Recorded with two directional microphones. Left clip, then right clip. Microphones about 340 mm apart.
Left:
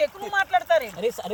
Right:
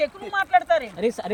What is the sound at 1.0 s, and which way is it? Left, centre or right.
Speech, left.